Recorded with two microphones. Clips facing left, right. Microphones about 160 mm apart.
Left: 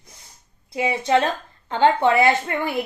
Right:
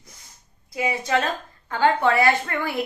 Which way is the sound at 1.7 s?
20° left (ahead or behind).